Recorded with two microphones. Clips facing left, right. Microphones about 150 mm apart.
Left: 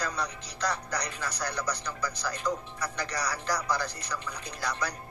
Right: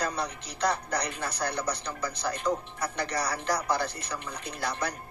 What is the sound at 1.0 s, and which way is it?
Speech, 55° right (ahead or behind).